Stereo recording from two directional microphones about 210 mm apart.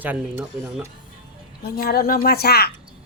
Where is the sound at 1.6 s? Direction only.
45° left (ahead or behind).